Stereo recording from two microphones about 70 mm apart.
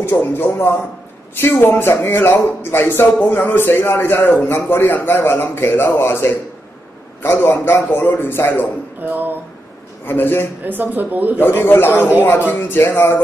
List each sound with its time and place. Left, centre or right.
0.2 s speech: left
10.0 s speech: left
10.6 s speech: right
11.3 s speech: left